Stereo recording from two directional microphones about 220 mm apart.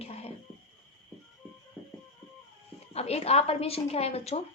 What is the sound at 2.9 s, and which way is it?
Speech, 30° left (ahead or behind).